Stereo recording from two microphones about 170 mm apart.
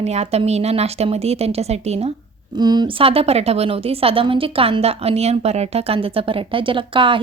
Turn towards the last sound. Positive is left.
turn(degrees=-30)  # may be behind; listen again after turning